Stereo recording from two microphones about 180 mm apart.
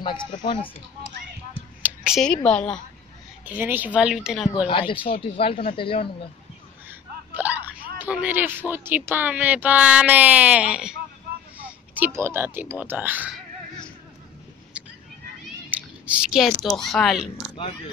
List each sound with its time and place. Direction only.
1.8 s speech: 5° right (ahead or behind)
3.4 s speech: 10° right (ahead or behind)
4.6 s speech: 30° left (ahead or behind)
6.9 s wail: 10° right (ahead or behind)
8.0 s speech: 10° right (ahead or behind)
14.7 s a sound: 5° right (ahead or behind)
15.7 s speech: 5° right (ahead or behind)